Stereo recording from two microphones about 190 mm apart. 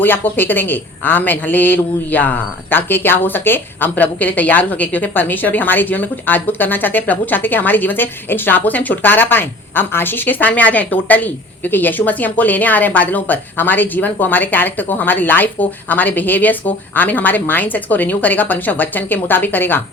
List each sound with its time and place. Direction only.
0.0 s a man's voice: 10° left (ahead or behind)